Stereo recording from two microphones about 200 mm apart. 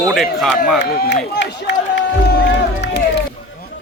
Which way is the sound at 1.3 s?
60° left (ahead or behind).